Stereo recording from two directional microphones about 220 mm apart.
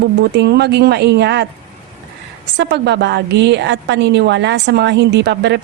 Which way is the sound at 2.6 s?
50° right (ahead or behind).